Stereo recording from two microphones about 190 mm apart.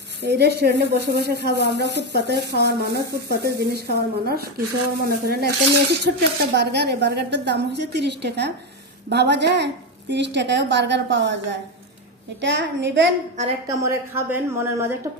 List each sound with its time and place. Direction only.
0.2 s a woman's voice: 60° right (ahead or behind)
13.7 s a woman's voice: 15° right (ahead or behind)